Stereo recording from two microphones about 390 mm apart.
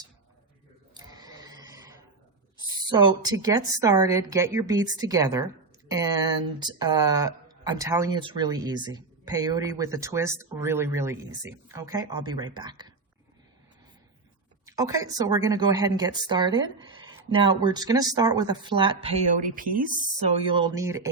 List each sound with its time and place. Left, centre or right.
0.9 s a sound: centre
2.9 s speech: centre
14.7 s speech: centre
20.6 s speech: centre